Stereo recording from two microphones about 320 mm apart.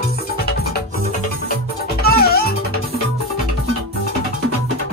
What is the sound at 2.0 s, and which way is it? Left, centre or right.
Music, left.